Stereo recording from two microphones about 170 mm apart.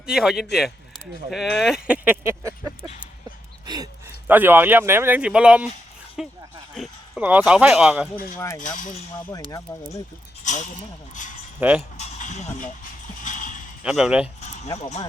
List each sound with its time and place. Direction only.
0.0 s speech: 5° right (ahead or behind)
4.3 s speech: 10° right (ahead or behind)
8.5 s speech: 50° left (ahead or behind)
9.5 s speech: 20° left (ahead or behind)
10.4 s speech: 45° left (ahead or behind)
11.8 s a sound: 40° left (ahead or behind)
13.8 s speech: 5° right (ahead or behind)
14.8 s speech: 40° left (ahead or behind)